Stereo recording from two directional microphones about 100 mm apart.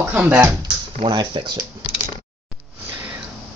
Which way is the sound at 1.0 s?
50° right (ahead or behind).